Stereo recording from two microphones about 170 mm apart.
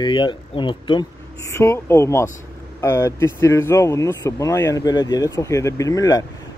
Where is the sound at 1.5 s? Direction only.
15° left (ahead or behind).